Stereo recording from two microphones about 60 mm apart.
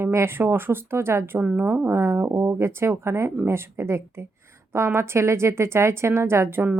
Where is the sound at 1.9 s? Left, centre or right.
Right.